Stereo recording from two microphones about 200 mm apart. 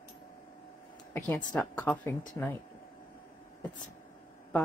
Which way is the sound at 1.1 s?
10° left (ahead or behind).